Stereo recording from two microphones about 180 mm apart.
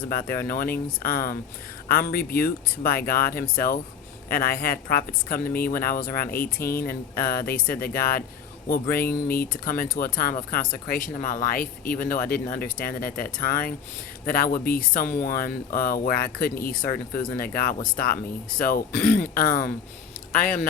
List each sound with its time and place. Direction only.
0.1 s speech: 55° left (ahead or behind)